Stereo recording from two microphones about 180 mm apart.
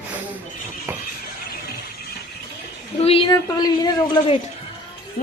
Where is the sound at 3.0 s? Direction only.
30° left (ahead or behind).